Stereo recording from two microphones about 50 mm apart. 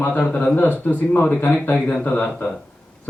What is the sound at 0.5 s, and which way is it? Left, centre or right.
Speech, left.